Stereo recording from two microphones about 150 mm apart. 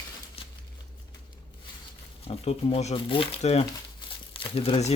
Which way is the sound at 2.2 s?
45° left (ahead or behind).